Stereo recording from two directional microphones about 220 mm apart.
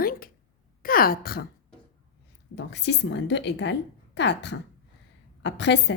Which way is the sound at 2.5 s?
50° left (ahead or behind).